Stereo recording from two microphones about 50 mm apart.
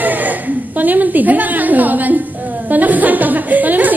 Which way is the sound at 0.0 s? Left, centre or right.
Right.